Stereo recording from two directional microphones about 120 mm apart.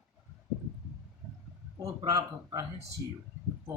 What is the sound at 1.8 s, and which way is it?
Speech, 35° right (ahead or behind).